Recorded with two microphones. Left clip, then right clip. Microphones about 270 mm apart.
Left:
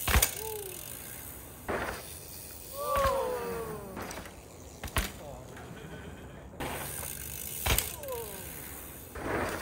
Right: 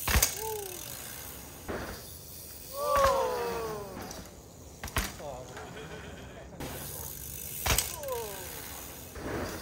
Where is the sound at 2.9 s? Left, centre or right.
Centre.